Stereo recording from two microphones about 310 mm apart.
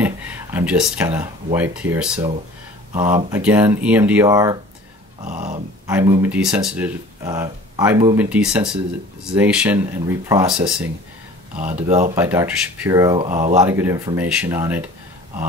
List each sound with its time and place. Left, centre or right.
0.0 s speech: centre
5.2 s speech: right
5.9 s speech: centre
11.6 s speech: right
12.2 s speech: centre
13.3 s speech: right
13.6 s speech: centre